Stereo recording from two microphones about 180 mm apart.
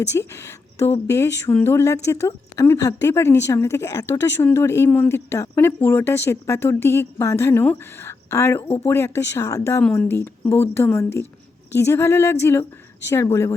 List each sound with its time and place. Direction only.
0.1 s a woman's voice: 15° left (ahead or behind)